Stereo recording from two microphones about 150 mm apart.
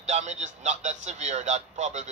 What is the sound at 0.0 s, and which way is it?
A woman's voice, 50° right (ahead or behind).